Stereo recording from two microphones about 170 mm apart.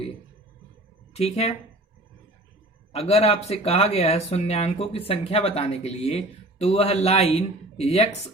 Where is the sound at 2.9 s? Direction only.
35° left (ahead or behind).